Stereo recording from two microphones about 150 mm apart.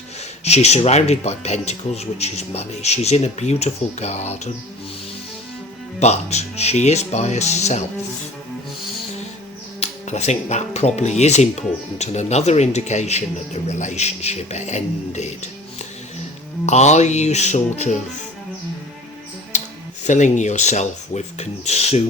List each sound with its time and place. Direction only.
0.4 s speech: 45° left (ahead or behind)
6.0 s speech: 45° left (ahead or behind)
9.8 s speech: 50° left (ahead or behind)
16.6 s speech: 50° left (ahead or behind)
19.5 s a sound: 50° left (ahead or behind)
20.1 s speech: 55° left (ahead or behind)